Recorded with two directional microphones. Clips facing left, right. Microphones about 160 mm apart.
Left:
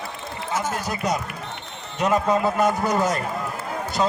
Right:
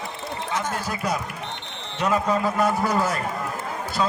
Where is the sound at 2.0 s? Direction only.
15° left (ahead or behind).